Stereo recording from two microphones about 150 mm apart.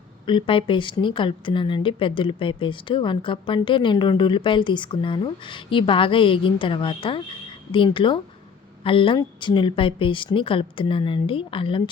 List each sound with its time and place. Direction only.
0.3 s speech: 35° left (ahead or behind)